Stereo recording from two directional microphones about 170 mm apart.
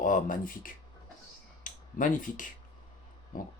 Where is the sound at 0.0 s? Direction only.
50° left (ahead or behind).